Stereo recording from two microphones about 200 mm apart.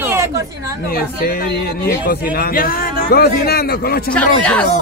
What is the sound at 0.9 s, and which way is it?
Speech, 50° left (ahead or behind).